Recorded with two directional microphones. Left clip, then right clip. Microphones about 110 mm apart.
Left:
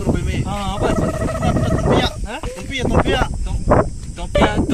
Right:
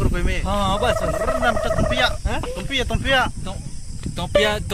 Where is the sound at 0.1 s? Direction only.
Centre (ahead or behind).